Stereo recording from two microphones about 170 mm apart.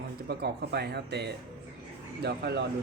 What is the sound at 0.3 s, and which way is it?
Speech, 75° right (ahead or behind).